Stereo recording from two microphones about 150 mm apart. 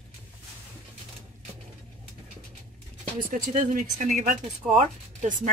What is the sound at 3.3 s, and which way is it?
Speech, 60° right (ahead or behind).